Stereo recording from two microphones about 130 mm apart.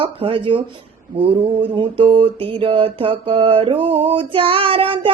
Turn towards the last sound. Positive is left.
turn(degrees=-45)  # may be behind; listen again after turning